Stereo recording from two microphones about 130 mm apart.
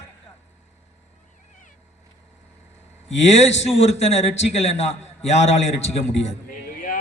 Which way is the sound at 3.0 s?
60° left (ahead or behind).